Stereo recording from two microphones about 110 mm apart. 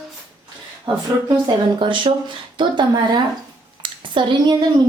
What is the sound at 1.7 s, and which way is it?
Speech, 45° right (ahead or behind).